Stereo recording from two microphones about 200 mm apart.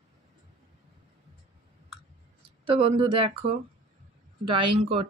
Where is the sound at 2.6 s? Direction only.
25° right (ahead or behind).